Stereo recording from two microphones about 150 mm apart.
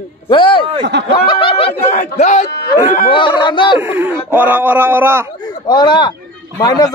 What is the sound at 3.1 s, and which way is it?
Speech, 35° left (ahead or behind).